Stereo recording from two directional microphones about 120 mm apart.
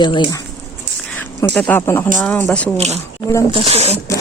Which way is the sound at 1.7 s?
20° left (ahead or behind).